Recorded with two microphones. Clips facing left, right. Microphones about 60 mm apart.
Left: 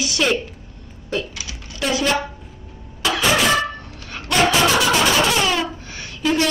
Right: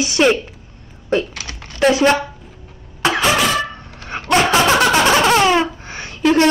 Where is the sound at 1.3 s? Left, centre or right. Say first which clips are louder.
Right 7 dB; right.